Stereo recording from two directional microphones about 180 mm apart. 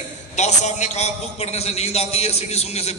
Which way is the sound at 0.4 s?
40° left (ahead or behind).